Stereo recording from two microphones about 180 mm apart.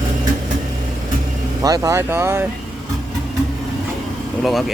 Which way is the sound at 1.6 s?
20° right (ahead or behind).